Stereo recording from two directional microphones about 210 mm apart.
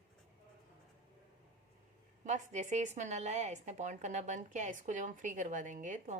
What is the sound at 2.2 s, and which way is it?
A woman's voice, 35° right (ahead or behind).